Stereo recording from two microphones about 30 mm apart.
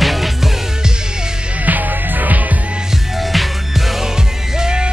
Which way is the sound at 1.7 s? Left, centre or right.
Right.